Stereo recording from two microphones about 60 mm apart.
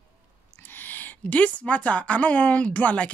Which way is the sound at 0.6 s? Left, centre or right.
Left.